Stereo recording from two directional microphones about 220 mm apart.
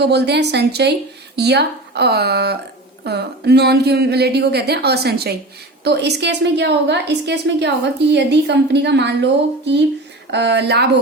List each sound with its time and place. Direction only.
0.0 s a woman's voice: 50° right (ahead or behind)